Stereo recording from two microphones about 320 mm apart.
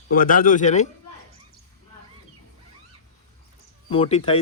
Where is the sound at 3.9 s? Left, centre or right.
Centre.